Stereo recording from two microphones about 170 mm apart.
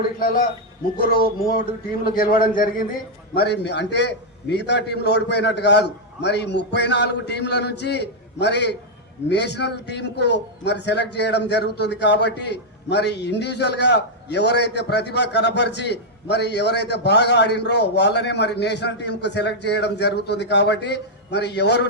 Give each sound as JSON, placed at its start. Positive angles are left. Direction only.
{"t": 1.1, "sound": "a man's voice", "side_deg": 55}
{"t": 3.3, "sound": "a man's voice", "side_deg": 80}